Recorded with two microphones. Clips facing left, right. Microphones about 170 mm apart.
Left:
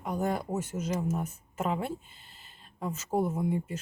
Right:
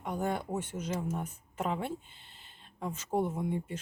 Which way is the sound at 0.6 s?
5° left (ahead or behind).